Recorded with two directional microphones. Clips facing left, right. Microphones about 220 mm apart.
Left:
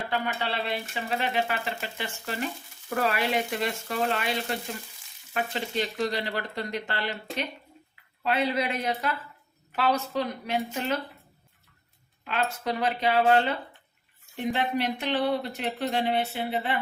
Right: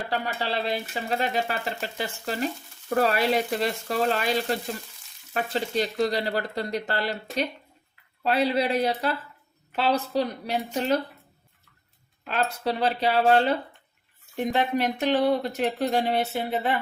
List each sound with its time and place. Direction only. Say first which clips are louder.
0.1 s a woman's voice: right 2 dB; 35° right (ahead or behind)
12.3 s speech: right 2 dB; 35° right (ahead or behind)